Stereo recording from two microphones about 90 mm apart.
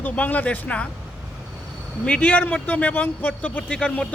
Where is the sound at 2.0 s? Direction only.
10° left (ahead or behind).